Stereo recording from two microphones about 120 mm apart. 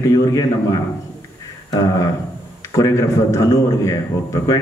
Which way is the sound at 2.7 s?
25° left (ahead or behind).